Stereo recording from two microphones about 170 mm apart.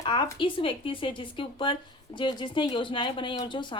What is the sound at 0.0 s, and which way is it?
A woman's voice, 30° left (ahead or behind).